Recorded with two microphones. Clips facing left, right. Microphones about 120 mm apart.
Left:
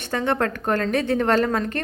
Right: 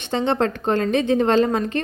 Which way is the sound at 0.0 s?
25° right (ahead or behind).